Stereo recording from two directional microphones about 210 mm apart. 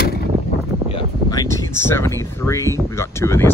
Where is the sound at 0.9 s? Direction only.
20° left (ahead or behind).